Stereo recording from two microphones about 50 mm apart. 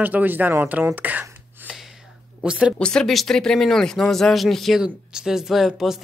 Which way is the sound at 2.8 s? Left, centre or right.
Centre.